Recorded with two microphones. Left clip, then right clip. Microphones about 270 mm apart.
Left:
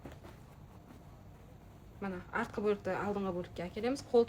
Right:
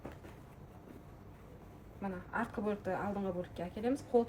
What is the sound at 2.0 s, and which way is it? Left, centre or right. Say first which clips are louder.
Speech: left 1 dB; left.